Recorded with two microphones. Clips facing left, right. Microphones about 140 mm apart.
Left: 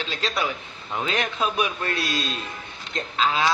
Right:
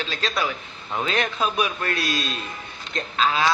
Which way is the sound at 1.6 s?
25° left (ahead or behind).